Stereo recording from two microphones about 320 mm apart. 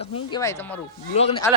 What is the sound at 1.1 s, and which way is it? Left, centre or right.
Speech, centre.